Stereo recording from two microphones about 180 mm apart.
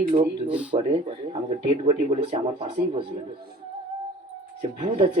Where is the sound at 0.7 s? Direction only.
30° right (ahead or behind).